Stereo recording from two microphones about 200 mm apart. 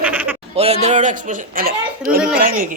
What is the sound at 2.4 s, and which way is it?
Speech, 45° right (ahead or behind).